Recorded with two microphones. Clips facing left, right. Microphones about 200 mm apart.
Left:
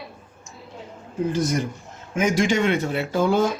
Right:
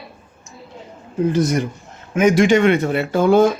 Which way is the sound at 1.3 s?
65° right (ahead or behind).